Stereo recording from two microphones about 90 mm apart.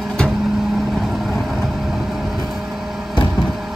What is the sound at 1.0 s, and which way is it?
Vehicle, centre (ahead or behind).